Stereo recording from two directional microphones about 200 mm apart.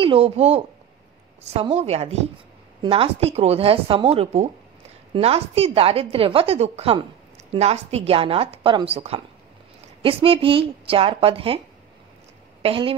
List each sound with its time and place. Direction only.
0.0 s a woman's voice: 25° right (ahead or behind)
12.6 s a woman's voice: 25° right (ahead or behind)